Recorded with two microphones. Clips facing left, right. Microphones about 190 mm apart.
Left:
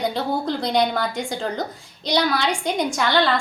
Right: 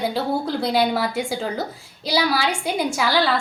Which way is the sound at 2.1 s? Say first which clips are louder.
Even; 5° right (ahead or behind).